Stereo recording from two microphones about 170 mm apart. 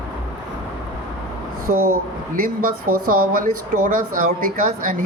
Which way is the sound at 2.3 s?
55° right (ahead or behind).